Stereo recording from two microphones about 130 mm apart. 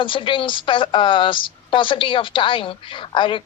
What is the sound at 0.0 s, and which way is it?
Speech, 40° left (ahead or behind).